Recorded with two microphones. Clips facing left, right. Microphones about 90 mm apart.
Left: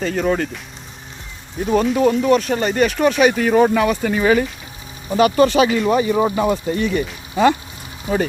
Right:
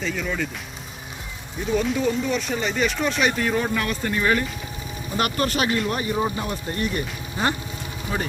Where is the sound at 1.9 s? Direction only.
55° left (ahead or behind); by 4.4 s 90° left.